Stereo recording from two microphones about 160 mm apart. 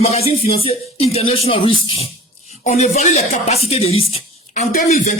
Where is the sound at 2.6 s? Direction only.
45° left (ahead or behind).